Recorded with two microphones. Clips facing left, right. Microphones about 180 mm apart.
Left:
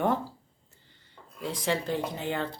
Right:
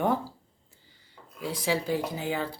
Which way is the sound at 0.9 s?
5° right (ahead or behind).